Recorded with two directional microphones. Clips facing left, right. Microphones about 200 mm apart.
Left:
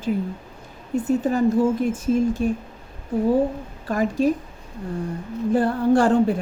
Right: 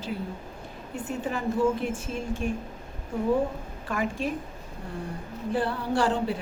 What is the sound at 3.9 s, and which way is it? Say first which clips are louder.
Speech: left 9 dB; 40° left (ahead or behind).